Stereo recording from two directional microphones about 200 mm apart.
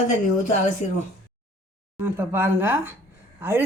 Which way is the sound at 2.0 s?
10° right (ahead or behind).